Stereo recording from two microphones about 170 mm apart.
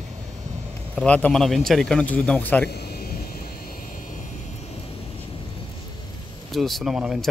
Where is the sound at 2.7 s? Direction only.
65° left (ahead or behind).